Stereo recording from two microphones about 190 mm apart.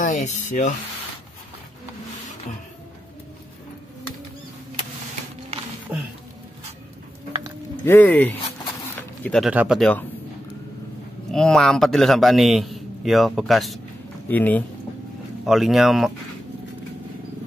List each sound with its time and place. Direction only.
0.0 s speech: 40° left (ahead or behind)
5.9 s a sound: 10° right (ahead or behind)
7.8 s a man's voice: 10° left (ahead or behind)
11.3 s a man's voice: centre (ahead or behind)
15.4 s a man's voice: centre (ahead or behind)